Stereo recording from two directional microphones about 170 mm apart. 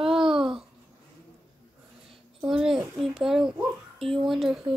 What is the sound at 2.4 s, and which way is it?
Speech, 5° right (ahead or behind).